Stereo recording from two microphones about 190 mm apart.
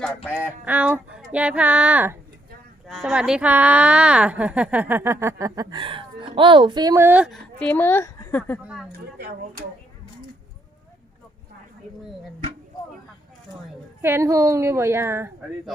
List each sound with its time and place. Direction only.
0.3 s a woman's voice: 5° right (ahead or behind); by 8.6 s 10° left (ahead or behind)
8.6 s speech: 5° right (ahead or behind)
8.9 s speech: 55° right (ahead or behind)
14.0 s a woman's voice: 15° right (ahead or behind)